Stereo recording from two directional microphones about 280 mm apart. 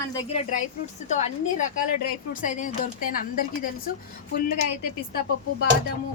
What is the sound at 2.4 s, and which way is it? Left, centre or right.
Speech, left.